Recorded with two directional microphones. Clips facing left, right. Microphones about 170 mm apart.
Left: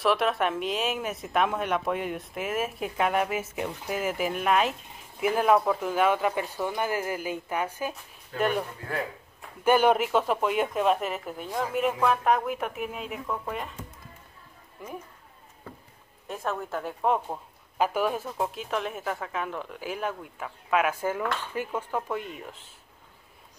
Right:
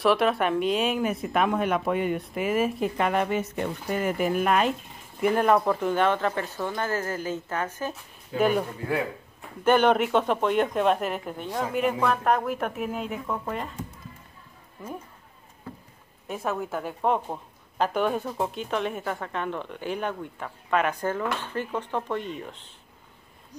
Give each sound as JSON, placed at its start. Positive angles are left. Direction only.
{"t": 0.0, "sound": "a woman's voice", "side_deg": 0}
{"t": 8.4, "sound": "a woman's voice", "side_deg": 0}
{"t": 9.7, "sound": "a woman's voice", "side_deg": 5}
{"t": 16.3, "sound": "a woman's voice", "side_deg": -5}